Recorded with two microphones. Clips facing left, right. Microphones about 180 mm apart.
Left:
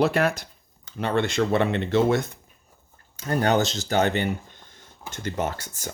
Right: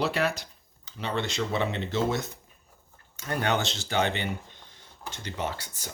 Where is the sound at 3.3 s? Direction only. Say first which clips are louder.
Left 6 dB; 40° left (ahead or behind).